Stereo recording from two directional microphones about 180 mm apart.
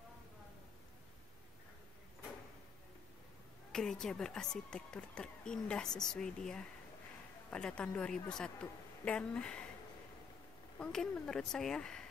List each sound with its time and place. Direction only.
3.7 s a woman's voice: 5° left (ahead or behind)
10.8 s a woman's voice: 5° left (ahead or behind)